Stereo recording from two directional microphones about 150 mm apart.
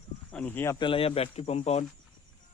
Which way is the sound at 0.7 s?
35° left (ahead or behind).